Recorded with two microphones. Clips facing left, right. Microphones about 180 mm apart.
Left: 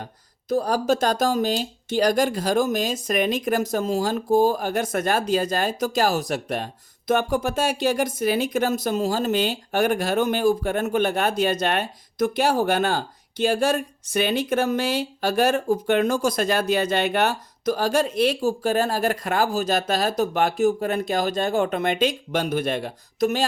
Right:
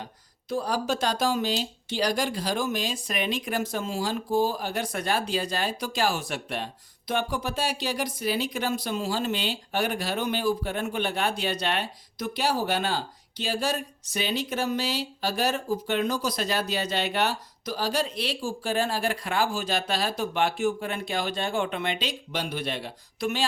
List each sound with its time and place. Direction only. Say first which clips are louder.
0.0 s speech: left 3 dB; 45° left (ahead or behind)